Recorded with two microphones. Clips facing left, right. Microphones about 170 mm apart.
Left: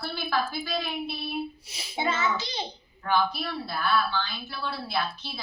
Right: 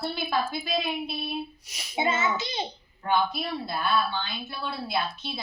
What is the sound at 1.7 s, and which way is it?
Child singing, 30° left (ahead or behind).